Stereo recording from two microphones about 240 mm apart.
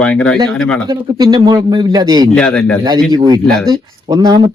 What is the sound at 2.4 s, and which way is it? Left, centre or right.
Speech, centre.